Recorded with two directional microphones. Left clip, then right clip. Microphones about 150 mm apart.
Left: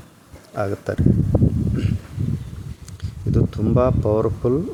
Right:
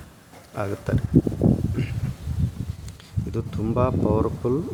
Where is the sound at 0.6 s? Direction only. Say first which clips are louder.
Left 4 dB; 15° left (ahead or behind).